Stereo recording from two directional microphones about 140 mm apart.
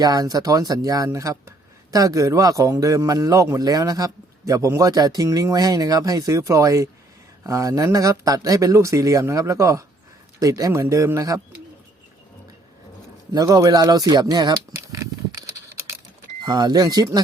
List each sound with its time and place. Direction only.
0.0 s speech: 25° right (ahead or behind)
13.3 s speech: 25° right (ahead or behind)
14.8 s a sound: 20° right (ahead or behind)
16.4 s speech: 30° right (ahead or behind)